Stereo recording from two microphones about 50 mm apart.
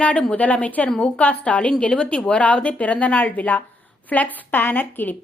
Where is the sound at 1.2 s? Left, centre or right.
Left.